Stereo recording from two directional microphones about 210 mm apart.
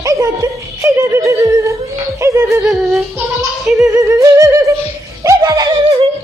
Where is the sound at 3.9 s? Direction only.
15° right (ahead or behind).